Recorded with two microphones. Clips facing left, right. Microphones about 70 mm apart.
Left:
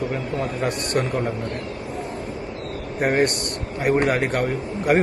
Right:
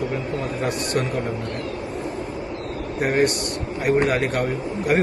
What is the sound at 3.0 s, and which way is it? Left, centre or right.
A man's voice, left.